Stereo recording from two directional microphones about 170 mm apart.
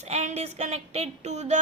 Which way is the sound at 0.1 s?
40° right (ahead or behind).